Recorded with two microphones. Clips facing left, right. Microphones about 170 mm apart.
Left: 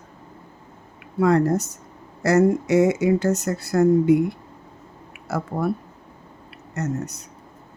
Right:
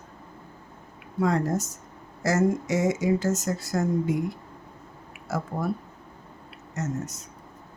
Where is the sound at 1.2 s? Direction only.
65° left (ahead or behind).